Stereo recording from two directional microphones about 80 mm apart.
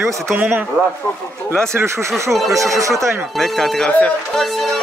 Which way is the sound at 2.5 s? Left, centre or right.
Right.